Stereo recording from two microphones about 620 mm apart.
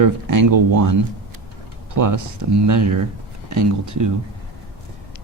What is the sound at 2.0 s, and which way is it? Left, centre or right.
Speech, right.